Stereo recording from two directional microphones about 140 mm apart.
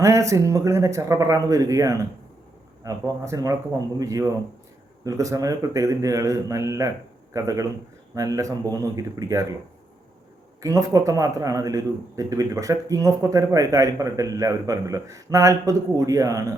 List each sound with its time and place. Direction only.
0.0 s speech: 20° right (ahead or behind)
10.6 s speech: 25° right (ahead or behind)